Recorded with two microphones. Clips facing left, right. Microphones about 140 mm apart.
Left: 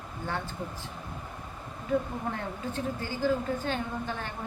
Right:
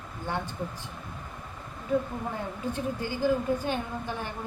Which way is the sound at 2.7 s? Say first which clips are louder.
Right 2 dB; 15° right (ahead or behind).